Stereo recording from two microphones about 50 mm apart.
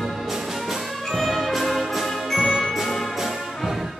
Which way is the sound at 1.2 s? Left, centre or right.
Centre.